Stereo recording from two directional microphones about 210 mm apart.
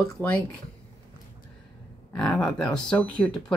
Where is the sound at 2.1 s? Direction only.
5° left (ahead or behind).